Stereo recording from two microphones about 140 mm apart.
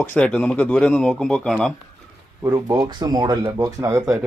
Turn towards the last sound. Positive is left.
turn(degrees=-25)  # may be behind; listen again after turning